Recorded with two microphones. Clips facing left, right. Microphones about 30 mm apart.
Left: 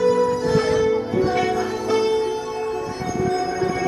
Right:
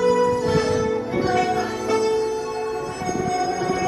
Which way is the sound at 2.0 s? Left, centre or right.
Left.